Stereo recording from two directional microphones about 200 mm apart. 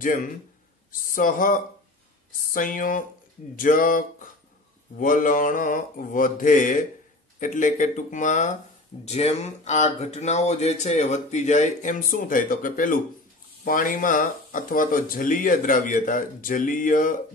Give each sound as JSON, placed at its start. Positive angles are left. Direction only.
{"t": 0.0, "sound": "speech", "side_deg": 40}